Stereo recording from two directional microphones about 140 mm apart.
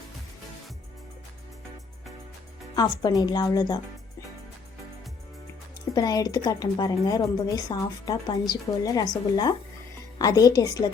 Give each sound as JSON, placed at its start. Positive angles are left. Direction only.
{"t": 2.7, "sound": "speech", "side_deg": 30}
{"t": 5.9, "sound": "speech", "side_deg": 25}